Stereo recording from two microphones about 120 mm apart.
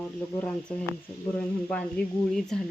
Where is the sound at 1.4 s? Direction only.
10° left (ahead or behind).